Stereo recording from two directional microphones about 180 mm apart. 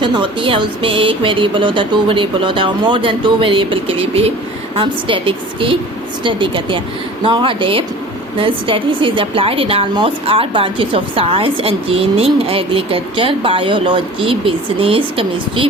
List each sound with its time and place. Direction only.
0.0 s a woman's voice: 30° right (ahead or behind)